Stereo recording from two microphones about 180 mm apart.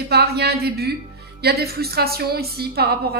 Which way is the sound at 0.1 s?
60° right (ahead or behind).